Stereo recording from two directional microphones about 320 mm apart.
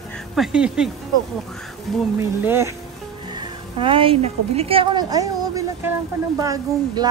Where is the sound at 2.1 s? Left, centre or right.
Centre.